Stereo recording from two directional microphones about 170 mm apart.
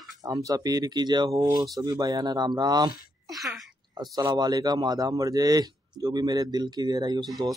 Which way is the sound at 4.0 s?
25° right (ahead or behind).